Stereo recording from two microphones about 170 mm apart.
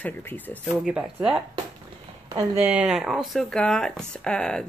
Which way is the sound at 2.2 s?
20° right (ahead or behind).